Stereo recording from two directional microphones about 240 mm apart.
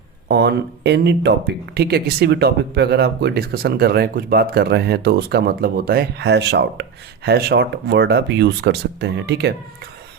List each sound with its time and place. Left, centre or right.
0.3 s speech: right